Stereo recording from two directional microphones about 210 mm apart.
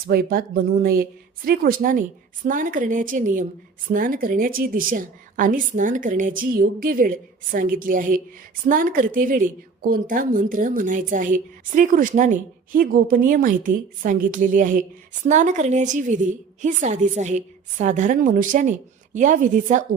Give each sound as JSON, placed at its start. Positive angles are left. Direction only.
{"t": 0.1, "sound": "a woman's voice", "side_deg": -45}